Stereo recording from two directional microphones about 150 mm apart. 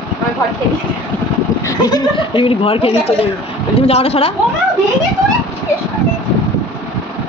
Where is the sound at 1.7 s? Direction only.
25° left (ahead or behind).